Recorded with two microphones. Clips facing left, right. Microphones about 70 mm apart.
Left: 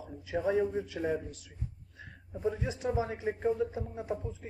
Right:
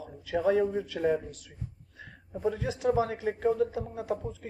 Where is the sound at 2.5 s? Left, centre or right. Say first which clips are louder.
Right 4 dB; right.